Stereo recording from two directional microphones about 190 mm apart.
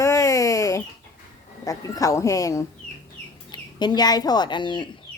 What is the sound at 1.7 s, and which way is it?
A woman's voice, 15° left (ahead or behind).